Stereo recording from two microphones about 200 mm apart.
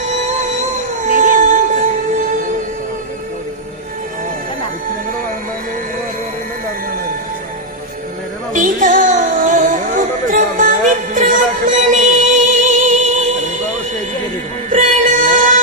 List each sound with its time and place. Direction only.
0.0 s music: 35° right (ahead or behind)
8.5 s music: 40° right (ahead or behind)
14.7 s music: 40° right (ahead or behind)